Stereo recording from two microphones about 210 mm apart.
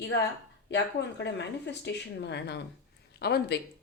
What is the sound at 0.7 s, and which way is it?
Speech, 55° left (ahead or behind).